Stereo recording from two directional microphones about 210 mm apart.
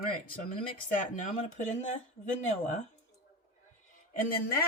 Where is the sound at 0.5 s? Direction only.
35° left (ahead or behind).